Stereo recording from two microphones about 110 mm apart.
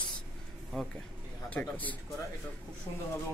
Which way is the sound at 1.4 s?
15° left (ahead or behind).